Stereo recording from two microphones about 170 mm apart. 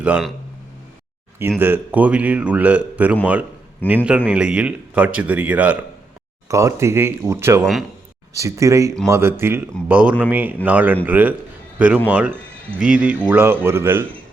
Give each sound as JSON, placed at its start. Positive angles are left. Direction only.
{"t": 1.4, "sound": "a man's voice", "side_deg": -15}
{"t": 7.6, "sound": "speech", "side_deg": 0}
{"t": 8.3, "sound": "a man's voice", "side_deg": -15}